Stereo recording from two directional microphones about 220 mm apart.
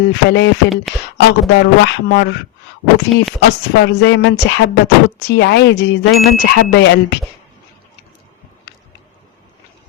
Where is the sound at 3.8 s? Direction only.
50° left (ahead or behind).